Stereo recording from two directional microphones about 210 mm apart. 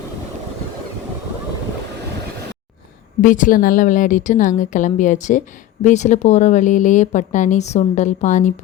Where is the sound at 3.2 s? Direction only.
40° left (ahead or behind).